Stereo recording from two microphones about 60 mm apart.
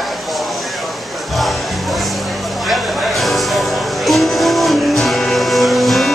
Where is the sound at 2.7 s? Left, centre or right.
Centre.